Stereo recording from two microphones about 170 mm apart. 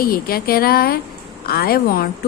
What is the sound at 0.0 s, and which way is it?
A woman's voice, 60° left (ahead or behind).